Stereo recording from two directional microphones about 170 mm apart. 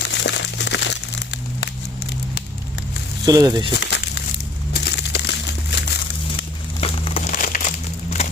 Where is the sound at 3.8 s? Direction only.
80° left.